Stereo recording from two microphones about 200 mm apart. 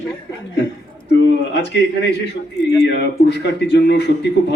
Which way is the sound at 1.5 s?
60° left (ahead or behind).